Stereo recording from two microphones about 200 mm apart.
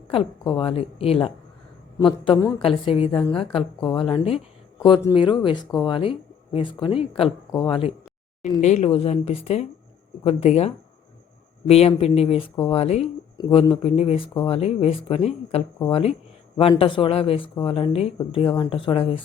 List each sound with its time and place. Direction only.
0.1 s a woman's voice: 25° left (ahead or behind)